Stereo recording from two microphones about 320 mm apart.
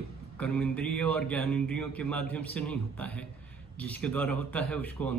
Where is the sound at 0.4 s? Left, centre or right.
Centre.